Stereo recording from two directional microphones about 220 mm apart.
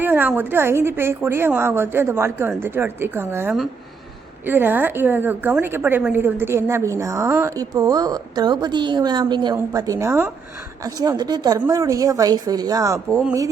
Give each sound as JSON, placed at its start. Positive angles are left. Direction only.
{"t": 0.0, "sound": "a woman's voice", "side_deg": -10}